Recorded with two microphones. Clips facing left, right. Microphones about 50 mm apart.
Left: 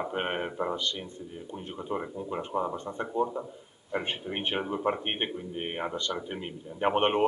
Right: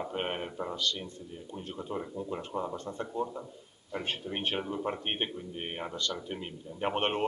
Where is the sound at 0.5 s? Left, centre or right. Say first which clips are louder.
Left 3 dB; left.